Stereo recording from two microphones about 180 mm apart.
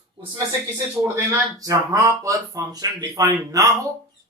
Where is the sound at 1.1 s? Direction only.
20° right (ahead or behind).